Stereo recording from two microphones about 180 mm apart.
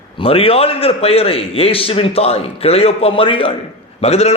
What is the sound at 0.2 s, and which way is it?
A man's voice, 30° left (ahead or behind).